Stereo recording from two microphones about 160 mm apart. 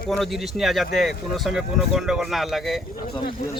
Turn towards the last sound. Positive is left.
turn(degrees=30)  # may be behind; listen again after turning